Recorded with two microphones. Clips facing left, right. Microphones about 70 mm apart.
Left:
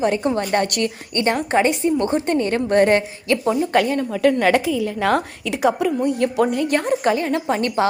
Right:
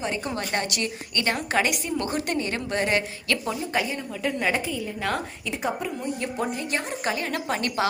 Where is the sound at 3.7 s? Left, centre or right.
Left.